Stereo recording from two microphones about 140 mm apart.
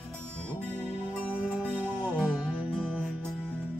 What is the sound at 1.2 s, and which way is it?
Music, 10° right (ahead or behind).